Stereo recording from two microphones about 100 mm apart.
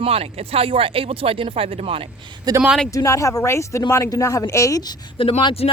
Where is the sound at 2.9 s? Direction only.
30° left (ahead or behind).